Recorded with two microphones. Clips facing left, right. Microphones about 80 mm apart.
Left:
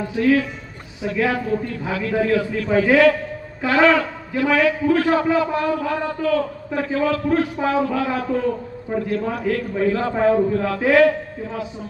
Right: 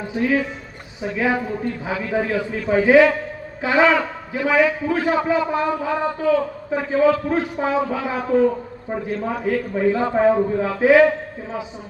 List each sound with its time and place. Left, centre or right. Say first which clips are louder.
0.2 s a man's voice: left 3 dB; centre